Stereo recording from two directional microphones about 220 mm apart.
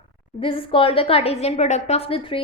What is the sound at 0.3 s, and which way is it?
A woman's voice, 25° left (ahead or behind).